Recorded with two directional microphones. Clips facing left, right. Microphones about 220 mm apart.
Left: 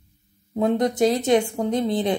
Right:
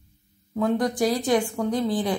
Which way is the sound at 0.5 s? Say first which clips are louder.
Left 2 dB; 20° left (ahead or behind).